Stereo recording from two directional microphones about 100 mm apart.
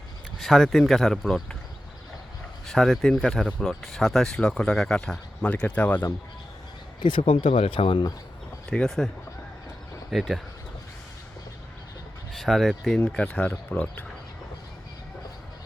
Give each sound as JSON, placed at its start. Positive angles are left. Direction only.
{"t": 0.3, "sound": "speech", "side_deg": 0}
{"t": 2.6, "sound": "speech", "side_deg": 5}
{"t": 7.0, "sound": "speech", "side_deg": 55}
{"t": 8.7, "sound": "speech", "side_deg": 5}
{"t": 10.1, "sound": "speech", "side_deg": 0}
{"t": 12.3, "sound": "speech", "side_deg": 0}
{"t": 13.2, "sound": "speech", "side_deg": 15}